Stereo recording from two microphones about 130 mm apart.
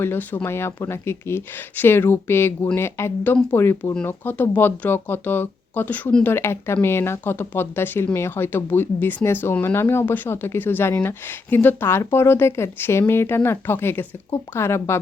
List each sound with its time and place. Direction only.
0.0 s speech: 15° left (ahead or behind)